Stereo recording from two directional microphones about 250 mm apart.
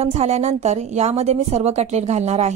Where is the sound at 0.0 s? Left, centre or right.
Right.